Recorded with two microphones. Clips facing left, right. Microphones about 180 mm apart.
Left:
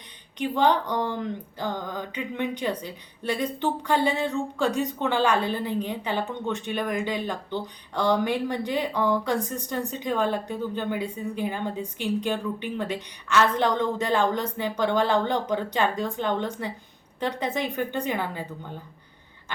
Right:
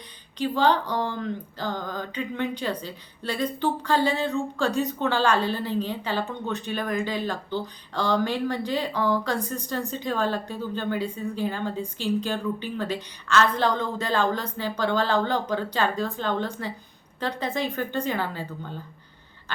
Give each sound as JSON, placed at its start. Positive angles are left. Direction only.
{"t": 0.3, "sound": "a woman's voice", "side_deg": 20}